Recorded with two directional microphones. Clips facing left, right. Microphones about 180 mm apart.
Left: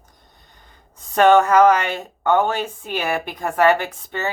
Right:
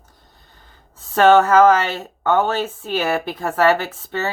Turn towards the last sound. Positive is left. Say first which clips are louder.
# right 1 dB
turn(degrees=15)  # may be behind; listen again after turning